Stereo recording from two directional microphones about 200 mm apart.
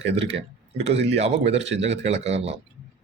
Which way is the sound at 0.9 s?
30° right (ahead or behind).